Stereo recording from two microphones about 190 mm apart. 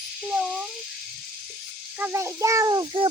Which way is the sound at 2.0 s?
15° right (ahead or behind).